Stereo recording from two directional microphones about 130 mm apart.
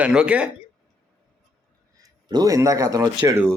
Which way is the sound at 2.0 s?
30° right (ahead or behind).